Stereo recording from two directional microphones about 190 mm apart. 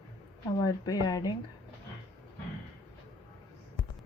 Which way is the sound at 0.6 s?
20° left (ahead or behind).